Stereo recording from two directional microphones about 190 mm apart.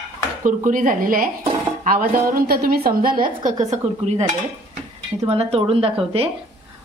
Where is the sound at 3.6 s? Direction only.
35° right (ahead or behind).